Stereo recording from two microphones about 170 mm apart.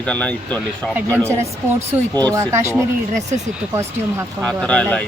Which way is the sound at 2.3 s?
15° right (ahead or behind).